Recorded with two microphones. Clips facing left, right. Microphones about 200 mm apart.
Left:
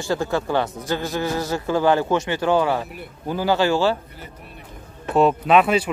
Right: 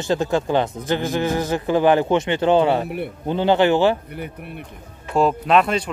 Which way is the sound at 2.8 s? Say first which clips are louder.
Right 9 dB; 60° right (ahead or behind).